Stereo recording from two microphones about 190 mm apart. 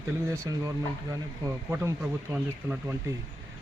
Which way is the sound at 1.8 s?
10° right (ahead or behind).